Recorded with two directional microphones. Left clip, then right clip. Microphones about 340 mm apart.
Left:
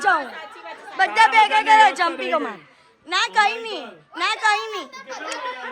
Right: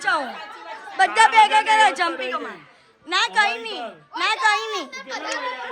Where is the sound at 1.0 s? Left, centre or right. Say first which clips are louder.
Right 1 dB; centre.